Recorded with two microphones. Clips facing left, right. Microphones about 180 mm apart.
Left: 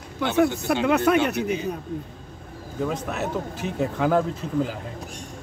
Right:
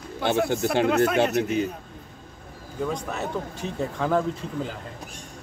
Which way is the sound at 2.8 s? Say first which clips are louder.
Left 2 dB; 5° left (ahead or behind).